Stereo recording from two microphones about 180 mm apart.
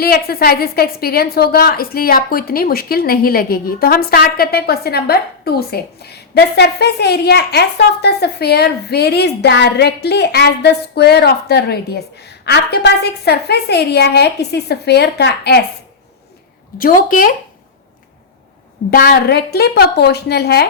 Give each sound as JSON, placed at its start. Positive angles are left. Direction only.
{"t": 0.0, "sound": "a woman's voice", "side_deg": 55}
{"t": 16.7, "sound": "speech", "side_deg": 50}
{"t": 18.9, "sound": "a woman's voice", "side_deg": 60}